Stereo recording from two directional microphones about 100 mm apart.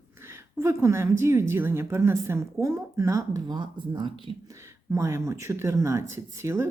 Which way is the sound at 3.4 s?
50° right (ahead or behind).